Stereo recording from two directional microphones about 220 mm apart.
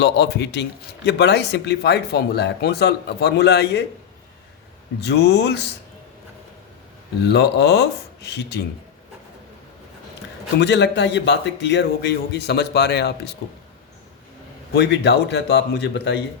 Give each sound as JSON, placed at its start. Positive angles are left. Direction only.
{"t": 0.0, "sound": "speech", "side_deg": 50}
{"t": 4.9, "sound": "speech", "side_deg": 50}
{"t": 7.3, "sound": "speech", "side_deg": 50}
{"t": 10.6, "sound": "speech", "side_deg": 50}
{"t": 14.7, "sound": "speech", "side_deg": 50}